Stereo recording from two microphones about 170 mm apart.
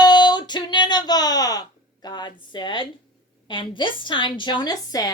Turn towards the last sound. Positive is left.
turn(degrees=20)  # may be behind; listen again after turning